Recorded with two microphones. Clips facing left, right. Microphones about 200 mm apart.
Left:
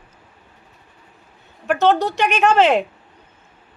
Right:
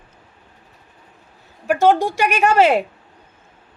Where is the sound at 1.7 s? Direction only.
10° right (ahead or behind).